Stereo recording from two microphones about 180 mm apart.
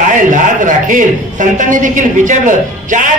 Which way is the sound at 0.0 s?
45° right (ahead or behind).